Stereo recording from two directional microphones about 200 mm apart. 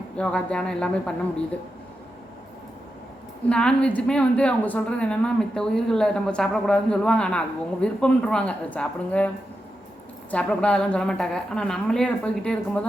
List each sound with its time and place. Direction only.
0.2 s a woman's voice: 5° left (ahead or behind)
3.5 s a woman's voice: 5° left (ahead or behind)
10.3 s a woman's voice: 5° left (ahead or behind)